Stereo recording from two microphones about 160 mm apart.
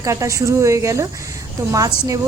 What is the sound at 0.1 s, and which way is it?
Speech, 20° right (ahead or behind).